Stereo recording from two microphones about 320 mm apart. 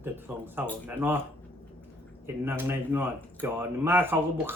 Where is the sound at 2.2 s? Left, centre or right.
Centre.